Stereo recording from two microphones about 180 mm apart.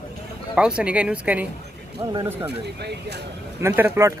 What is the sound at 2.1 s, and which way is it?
Speech, 20° right (ahead or behind).